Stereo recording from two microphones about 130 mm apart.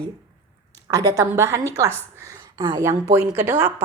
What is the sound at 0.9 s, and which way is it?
Speech, 25° right (ahead or behind).